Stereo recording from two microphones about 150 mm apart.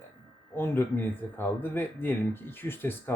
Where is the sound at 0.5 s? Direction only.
15° left (ahead or behind).